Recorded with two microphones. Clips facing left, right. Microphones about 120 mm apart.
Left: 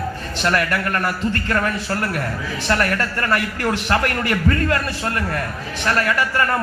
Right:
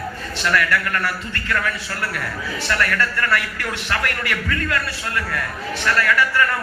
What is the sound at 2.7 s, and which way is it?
A man's voice, 30° left (ahead or behind).